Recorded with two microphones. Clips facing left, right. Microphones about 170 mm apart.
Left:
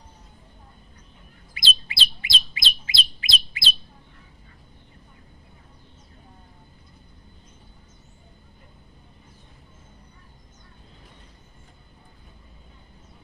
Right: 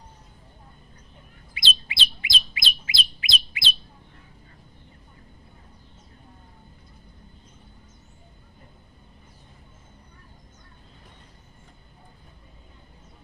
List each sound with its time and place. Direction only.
1.5 s bird: 40° left (ahead or behind)